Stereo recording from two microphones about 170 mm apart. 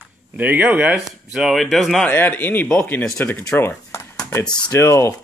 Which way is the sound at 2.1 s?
10° left (ahead or behind).